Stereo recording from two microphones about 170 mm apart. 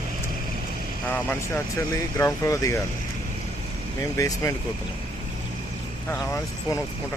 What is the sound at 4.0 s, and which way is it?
Speech, 20° left (ahead or behind).